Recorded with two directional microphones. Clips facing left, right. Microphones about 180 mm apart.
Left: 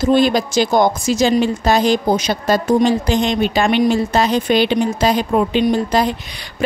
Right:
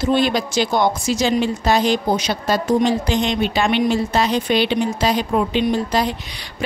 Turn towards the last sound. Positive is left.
turn(degrees=50)  # may be behind; listen again after turning